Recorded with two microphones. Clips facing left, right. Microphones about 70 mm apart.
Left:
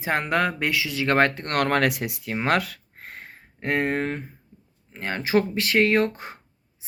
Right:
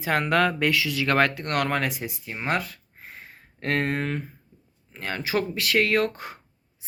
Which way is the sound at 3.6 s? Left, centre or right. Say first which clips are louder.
Left 2 dB; centre.